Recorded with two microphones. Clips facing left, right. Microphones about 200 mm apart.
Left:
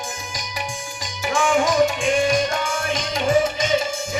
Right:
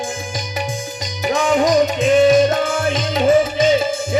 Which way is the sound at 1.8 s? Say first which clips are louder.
Right 7 dB; 25° right (ahead or behind).